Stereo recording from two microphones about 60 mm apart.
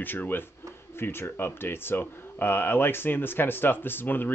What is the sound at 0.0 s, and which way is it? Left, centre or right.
Speech, left.